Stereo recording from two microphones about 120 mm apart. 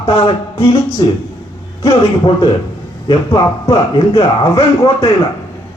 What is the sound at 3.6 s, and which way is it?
Speech, 55° left (ahead or behind).